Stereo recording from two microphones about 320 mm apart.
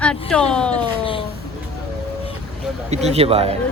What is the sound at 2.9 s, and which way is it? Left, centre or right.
Speech, centre.